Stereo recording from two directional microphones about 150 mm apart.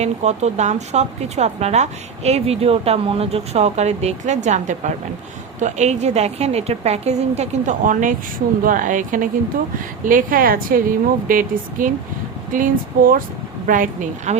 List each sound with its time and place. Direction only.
0.0 s a woman's voice: 45° right (ahead or behind)